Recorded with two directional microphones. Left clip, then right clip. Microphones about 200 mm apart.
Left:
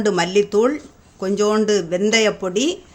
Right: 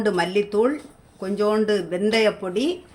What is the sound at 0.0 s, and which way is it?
A woman's voice, 25° left (ahead or behind).